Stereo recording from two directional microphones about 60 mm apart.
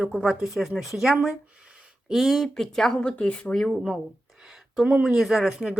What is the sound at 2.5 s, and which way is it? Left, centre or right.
Speech, centre.